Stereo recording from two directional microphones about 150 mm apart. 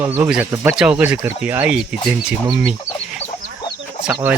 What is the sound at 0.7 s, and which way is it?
Speech, 5° right (ahead or behind).